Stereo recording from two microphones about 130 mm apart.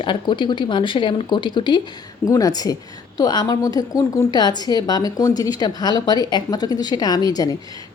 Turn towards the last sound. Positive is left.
turn(degrees=30)  # may be behind; listen again after turning